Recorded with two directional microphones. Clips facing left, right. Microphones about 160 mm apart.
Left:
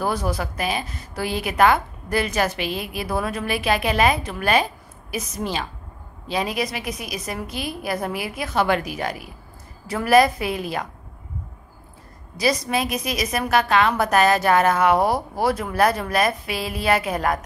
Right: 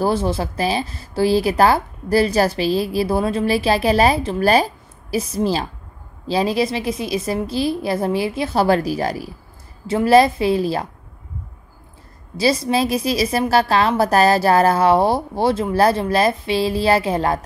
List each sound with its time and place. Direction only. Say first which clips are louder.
0.0 s a woman's voice: right 5 dB; 25° right (ahead or behind)
12.4 s a woman's voice: right 4 dB; 30° right (ahead or behind)